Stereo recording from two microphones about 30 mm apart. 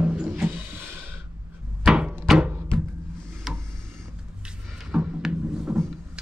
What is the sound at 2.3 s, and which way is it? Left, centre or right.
Music, centre.